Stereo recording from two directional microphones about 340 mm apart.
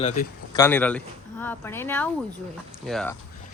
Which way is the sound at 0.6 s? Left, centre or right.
Centre.